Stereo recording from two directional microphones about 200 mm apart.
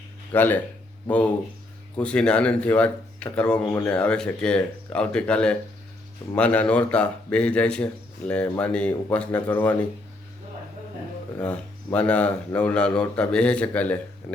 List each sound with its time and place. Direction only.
0.3 s speech: 10° left (ahead or behind)
2.0 s speech: 5° left (ahead or behind)
11.3 s speech: 5° left (ahead or behind)